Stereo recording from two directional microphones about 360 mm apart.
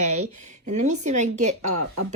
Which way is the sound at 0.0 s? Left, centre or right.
Centre.